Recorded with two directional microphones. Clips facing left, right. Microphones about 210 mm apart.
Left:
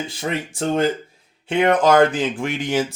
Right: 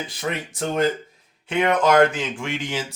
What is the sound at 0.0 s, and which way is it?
Speech, 25° left (ahead or behind).